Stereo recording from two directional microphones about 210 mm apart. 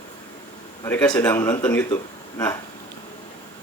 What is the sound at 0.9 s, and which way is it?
Speech, 10° left (ahead or behind).